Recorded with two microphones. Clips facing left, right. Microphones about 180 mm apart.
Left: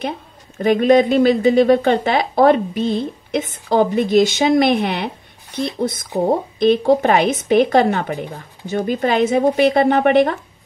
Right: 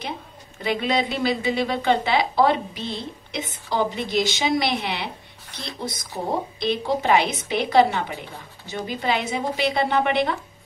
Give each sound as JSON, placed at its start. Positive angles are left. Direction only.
{"t": 0.6, "sound": "a woman's voice", "side_deg": 45}